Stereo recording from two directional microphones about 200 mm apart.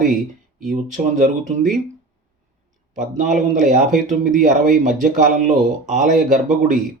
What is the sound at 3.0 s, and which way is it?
Speech, 40° right (ahead or behind).